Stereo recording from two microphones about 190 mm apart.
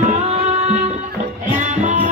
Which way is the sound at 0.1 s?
35° right (ahead or behind).